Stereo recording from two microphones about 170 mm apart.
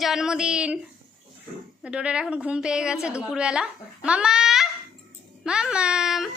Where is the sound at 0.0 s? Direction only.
5° right (ahead or behind).